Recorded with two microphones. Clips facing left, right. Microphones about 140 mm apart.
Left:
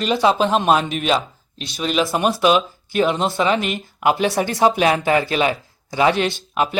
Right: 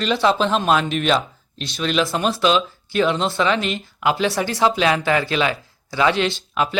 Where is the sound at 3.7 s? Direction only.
45° left (ahead or behind).